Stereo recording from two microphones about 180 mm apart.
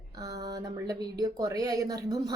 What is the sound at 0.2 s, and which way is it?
Speech, 20° right (ahead or behind).